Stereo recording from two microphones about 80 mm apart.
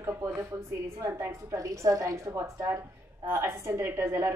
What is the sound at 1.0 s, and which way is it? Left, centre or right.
A woman's voice, right.